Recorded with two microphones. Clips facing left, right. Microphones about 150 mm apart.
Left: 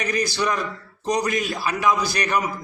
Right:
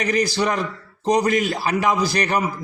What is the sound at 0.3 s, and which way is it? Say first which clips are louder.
A man's voice: right 2 dB; 30° right (ahead or behind).